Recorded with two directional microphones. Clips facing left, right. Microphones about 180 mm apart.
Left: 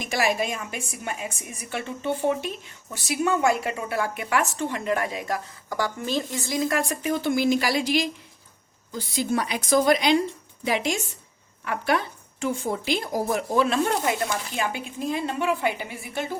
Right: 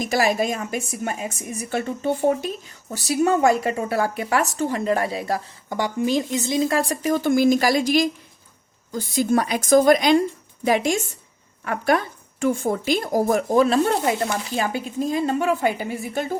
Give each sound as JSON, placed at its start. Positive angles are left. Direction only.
{"t": 0.0, "sound": "a woman's voice", "side_deg": -40}